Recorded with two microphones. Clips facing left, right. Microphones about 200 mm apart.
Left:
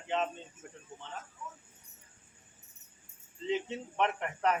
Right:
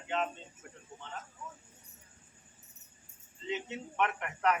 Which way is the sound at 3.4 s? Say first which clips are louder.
Left 4 dB; 30° left (ahead or behind).